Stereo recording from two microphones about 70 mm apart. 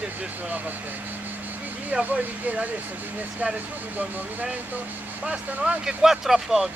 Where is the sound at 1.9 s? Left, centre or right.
Centre.